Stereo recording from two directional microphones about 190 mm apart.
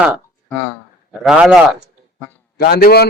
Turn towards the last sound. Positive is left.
turn(degrees=55)  # may be behind; listen again after turning